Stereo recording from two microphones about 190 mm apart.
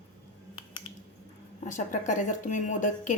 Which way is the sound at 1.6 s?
40° left (ahead or behind).